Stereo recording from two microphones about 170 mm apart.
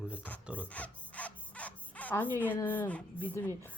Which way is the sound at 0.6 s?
10° left (ahead or behind).